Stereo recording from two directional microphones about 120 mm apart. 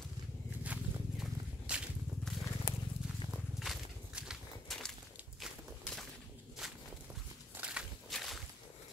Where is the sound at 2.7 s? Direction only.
35° left (ahead or behind).